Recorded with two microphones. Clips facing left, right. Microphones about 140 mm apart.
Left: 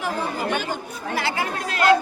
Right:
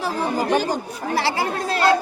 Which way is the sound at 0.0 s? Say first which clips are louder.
Right 3 dB; 35° right (ahead or behind).